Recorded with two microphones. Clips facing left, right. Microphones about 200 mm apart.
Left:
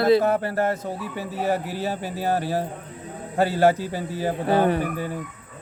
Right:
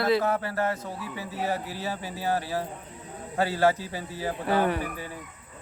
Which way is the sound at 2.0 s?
60° left (ahead or behind).